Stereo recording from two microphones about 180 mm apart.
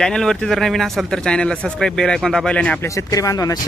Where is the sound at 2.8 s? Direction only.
20° left (ahead or behind).